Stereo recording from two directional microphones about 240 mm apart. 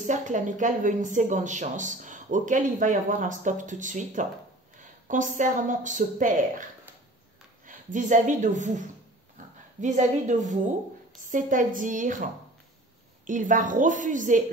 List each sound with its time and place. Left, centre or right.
0.0 s a woman's voice: right
13.3 s a woman's voice: right